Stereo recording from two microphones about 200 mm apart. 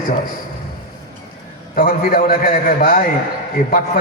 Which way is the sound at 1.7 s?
45° left (ahead or behind).